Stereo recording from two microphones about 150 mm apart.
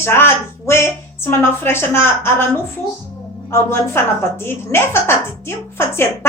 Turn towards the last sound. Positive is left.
turn(degrees=15)  # may be behind; listen again after turning